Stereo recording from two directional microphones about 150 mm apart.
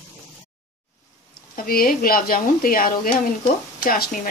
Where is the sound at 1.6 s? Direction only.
75° left (ahead or behind).